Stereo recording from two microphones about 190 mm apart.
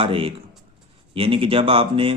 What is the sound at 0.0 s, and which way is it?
Speech, 30° right (ahead or behind).